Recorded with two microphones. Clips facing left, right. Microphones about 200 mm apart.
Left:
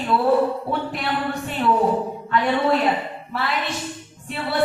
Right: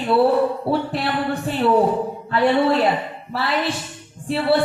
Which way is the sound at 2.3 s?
30° right (ahead or behind).